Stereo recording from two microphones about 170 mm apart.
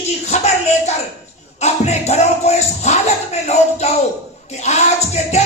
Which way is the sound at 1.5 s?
40° left (ahead or behind).